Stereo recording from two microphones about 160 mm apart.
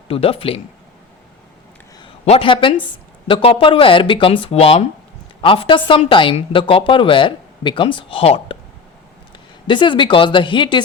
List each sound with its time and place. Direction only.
0.1 s a woman's voice: 35° left (ahead or behind)
2.2 s a woman's voice: 35° left (ahead or behind)
9.6 s a woman's voice: 30° left (ahead or behind)